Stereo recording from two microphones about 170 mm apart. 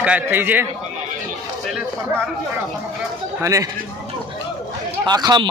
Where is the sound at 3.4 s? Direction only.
20° right (ahead or behind).